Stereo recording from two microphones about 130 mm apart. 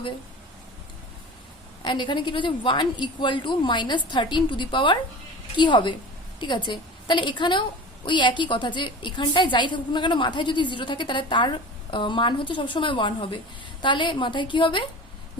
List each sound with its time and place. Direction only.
1.8 s a woman's voice: 35° left (ahead or behind)